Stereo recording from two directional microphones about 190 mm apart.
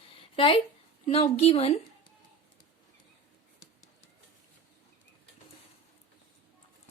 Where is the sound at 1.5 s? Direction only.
30° left (ahead or behind).